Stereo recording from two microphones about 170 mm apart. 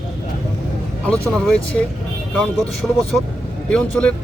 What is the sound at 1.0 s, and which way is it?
Speech, 5° left (ahead or behind).